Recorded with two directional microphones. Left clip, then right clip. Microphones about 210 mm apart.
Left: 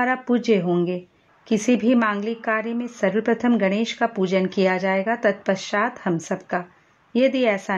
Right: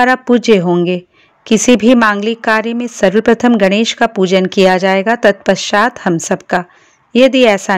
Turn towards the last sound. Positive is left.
turn(degrees=-35)  # may be behind; listen again after turning